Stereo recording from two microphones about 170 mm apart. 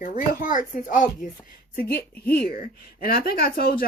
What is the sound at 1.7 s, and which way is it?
Speech, 60° left (ahead or behind).